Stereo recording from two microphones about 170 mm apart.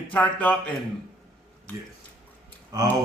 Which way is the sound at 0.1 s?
10° left (ahead or behind).